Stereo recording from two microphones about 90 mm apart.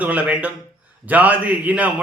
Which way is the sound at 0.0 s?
15° right (ahead or behind).